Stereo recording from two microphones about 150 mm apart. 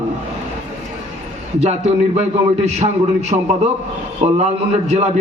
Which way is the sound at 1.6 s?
50° right (ahead or behind).